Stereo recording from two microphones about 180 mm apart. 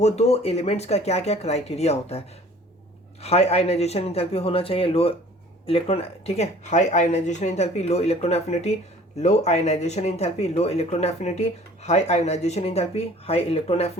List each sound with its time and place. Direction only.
0.0 s speech: 35° left (ahead or behind)